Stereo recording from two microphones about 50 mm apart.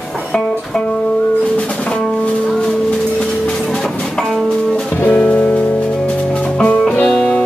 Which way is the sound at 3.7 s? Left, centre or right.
Centre.